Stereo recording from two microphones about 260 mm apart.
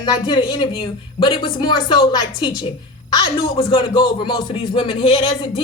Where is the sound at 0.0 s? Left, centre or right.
Centre.